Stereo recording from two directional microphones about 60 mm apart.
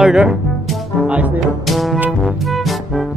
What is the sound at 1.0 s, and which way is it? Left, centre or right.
Speech, right.